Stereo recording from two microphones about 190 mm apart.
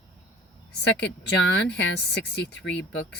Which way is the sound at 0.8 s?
65° left (ahead or behind).